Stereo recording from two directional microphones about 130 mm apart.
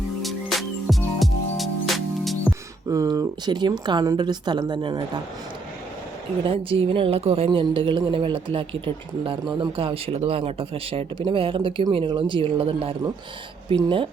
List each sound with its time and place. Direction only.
0.2 s music: centre (ahead or behind)
2.5 s music: 10° right (ahead or behind)
2.8 s speech: 25° right (ahead or behind)
6.4 s a woman's voice: 45° right (ahead or behind)